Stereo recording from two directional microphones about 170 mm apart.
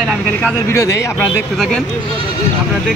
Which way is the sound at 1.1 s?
5° left (ahead or behind).